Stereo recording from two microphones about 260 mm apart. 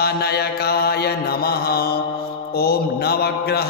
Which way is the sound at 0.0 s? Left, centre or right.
Left.